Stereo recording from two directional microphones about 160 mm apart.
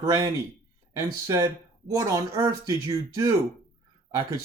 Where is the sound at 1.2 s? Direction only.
20° right (ahead or behind).